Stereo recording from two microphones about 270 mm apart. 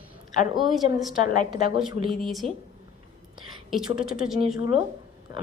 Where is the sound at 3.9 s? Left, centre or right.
Centre.